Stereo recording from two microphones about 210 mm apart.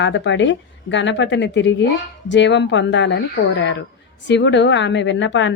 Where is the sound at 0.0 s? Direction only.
60° left (ahead or behind).